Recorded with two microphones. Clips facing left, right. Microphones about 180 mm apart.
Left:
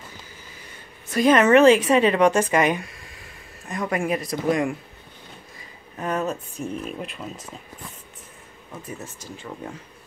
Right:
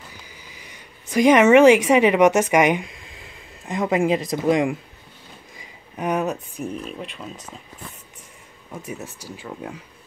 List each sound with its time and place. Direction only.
0.4 s speech: 15° right (ahead or behind)
6.7 s speech: centre (ahead or behind)
8.8 s speech: 10° right (ahead or behind)